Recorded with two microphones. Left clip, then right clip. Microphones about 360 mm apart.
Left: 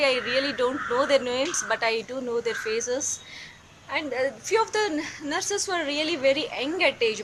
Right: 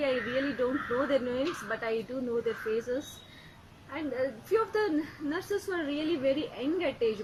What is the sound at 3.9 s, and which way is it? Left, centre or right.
A woman's voice, left.